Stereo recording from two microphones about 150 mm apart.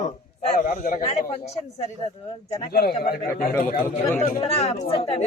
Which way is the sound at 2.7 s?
90° left.